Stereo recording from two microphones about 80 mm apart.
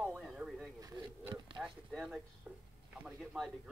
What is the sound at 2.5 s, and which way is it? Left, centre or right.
Speech, centre.